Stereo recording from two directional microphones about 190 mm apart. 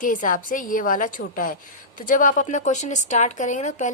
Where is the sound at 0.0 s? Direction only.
45° left (ahead or behind).